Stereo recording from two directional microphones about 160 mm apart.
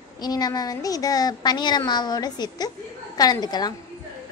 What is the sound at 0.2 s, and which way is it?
A woman's voice, 25° left (ahead or behind).